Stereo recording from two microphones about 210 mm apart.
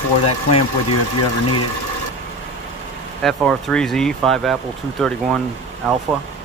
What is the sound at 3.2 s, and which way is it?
Speech, centre (ahead or behind).